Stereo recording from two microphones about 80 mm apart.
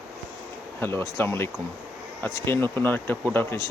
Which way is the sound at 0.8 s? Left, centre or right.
Left.